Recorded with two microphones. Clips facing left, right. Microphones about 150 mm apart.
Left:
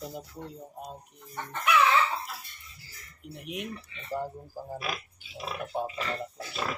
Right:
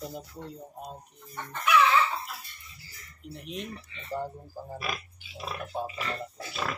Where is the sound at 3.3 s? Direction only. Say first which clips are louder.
Left 1 dB; 15° left (ahead or behind).